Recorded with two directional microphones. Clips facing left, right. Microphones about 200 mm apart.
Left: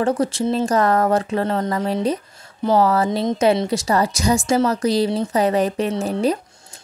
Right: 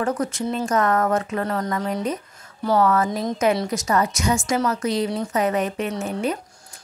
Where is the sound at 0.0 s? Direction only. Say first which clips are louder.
Left 4 dB; 30° left (ahead or behind).